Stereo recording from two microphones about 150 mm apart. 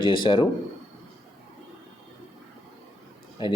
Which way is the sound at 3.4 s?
30° left (ahead or behind).